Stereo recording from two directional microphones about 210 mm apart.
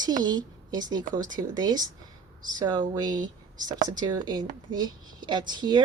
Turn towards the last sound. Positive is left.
turn(degrees=-20)  # may be behind; listen again after turning